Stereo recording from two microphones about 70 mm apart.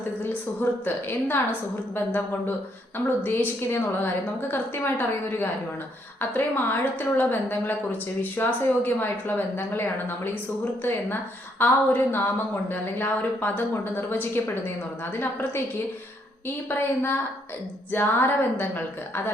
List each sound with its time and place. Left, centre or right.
0.2 s a woman's voice: left
3.2 s a woman's voice: left
11.6 s a woman's voice: left
16.6 s a woman's voice: left